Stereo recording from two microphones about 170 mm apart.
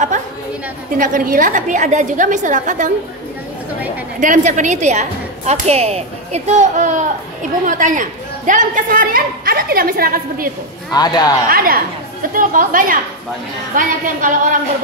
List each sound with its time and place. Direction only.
0.1 s chatter: 45° right (ahead or behind)
0.9 s speech: 55° right (ahead or behind)
4.2 s a woman's voice: 45° right (ahead or behind)
10.9 s speech: 25° left (ahead or behind)
11.4 s a woman's voice: 60° right (ahead or behind)